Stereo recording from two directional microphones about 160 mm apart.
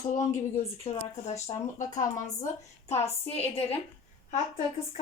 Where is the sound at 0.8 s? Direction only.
40° left (ahead or behind).